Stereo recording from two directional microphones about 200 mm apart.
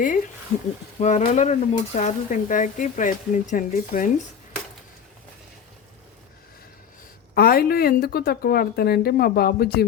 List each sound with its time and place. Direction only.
0.9 s speech: 40° left (ahead or behind)
7.3 s speech: 50° left (ahead or behind)